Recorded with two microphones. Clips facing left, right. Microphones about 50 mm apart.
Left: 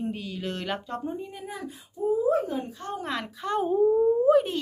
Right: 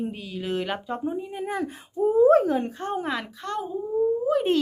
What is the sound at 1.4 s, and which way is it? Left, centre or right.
Speech, right.